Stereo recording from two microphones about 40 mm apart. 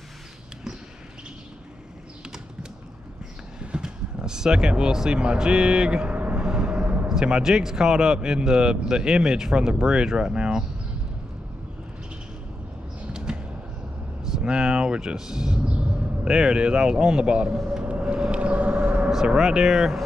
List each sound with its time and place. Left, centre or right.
3.7 s speech: centre; by 6.4 s right
6.4 s a sound: centre
6.8 s a sound: right
7.1 s speech: centre
13.0 s a sound: centre
15.1 s speech: centre
15.7 s speech: right
18.0 s vehicle: right
19.4 s speech: centre